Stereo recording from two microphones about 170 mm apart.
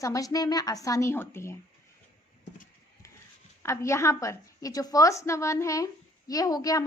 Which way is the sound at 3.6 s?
15° left (ahead or behind).